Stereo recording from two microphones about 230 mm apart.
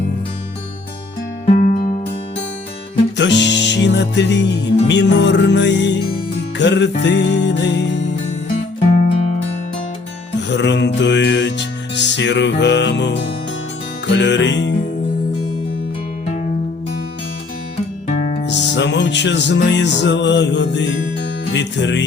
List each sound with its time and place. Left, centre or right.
3.2 s music: left
9.0 s music: left
10.5 s music: left
18.4 s music: left